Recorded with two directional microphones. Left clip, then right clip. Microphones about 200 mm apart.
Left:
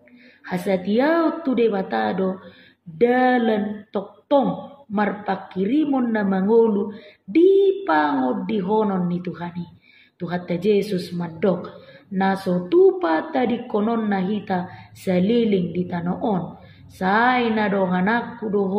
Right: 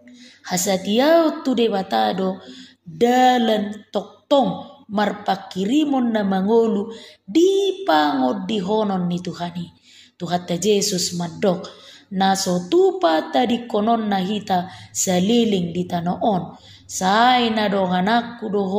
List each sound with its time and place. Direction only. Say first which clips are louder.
0.5 s a woman's voice: right 2 dB; 30° right (ahead or behind)